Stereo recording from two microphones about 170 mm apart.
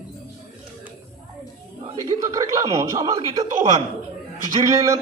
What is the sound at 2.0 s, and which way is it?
Speech, 20° right (ahead or behind).